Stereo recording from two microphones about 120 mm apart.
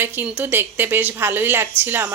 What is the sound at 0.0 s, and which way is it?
A woman's voice, 15° right (ahead or behind).